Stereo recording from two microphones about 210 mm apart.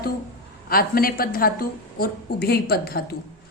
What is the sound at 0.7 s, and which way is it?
Speech, 45° left (ahead or behind).